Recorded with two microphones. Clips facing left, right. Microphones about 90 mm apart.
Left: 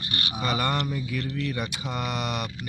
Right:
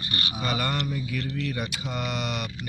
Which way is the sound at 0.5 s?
35° left (ahead or behind).